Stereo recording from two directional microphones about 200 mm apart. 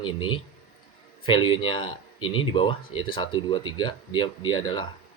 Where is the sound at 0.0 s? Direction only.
25° left (ahead or behind).